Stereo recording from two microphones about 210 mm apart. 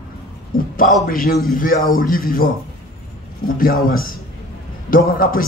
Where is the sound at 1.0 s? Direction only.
45° left (ahead or behind).